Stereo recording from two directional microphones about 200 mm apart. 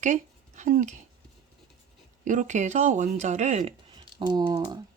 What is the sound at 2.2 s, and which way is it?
Speech, 40° right (ahead or behind).